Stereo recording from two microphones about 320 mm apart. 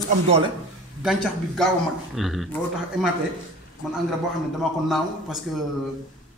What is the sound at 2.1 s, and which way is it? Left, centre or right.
Speech, centre.